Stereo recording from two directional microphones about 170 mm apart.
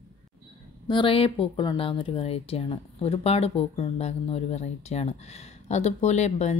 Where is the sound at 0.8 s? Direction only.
30° left (ahead or behind).